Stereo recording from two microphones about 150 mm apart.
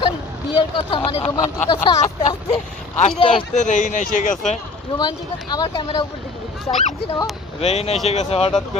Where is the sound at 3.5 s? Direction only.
55° left (ahead or behind).